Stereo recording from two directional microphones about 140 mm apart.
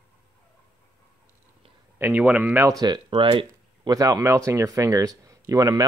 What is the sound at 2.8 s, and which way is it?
Speech, 35° right (ahead or behind).